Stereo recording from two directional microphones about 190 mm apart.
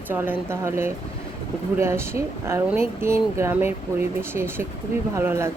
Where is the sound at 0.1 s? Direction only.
10° right (ahead or behind).